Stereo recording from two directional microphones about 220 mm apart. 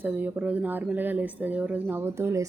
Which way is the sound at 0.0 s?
5° right (ahead or behind).